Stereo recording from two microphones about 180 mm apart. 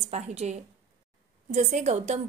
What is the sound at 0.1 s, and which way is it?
A woman's voice, 40° right (ahead or behind).